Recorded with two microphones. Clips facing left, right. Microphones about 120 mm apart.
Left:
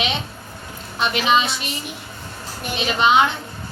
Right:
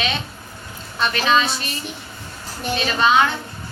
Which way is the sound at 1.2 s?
20° left (ahead or behind).